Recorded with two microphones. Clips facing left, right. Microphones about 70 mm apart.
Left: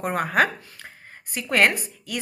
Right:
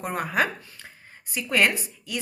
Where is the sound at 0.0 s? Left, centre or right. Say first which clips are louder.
Left 4 dB; left.